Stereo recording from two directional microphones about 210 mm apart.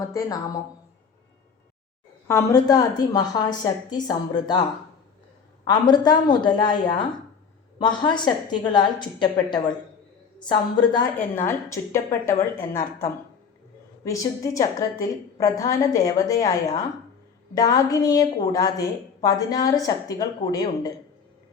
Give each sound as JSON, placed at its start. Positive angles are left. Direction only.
{"t": 0.0, "sound": "a woman's voice", "side_deg": 15}
{"t": 2.2, "sound": "a woman's voice", "side_deg": 15}
{"t": 5.6, "sound": "a woman's voice", "side_deg": 20}
{"t": 11.3, "sound": "a woman's voice", "side_deg": 10}